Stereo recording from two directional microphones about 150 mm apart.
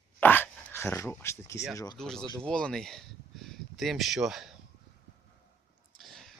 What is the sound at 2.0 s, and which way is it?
Speech, 5° left (ahead or behind).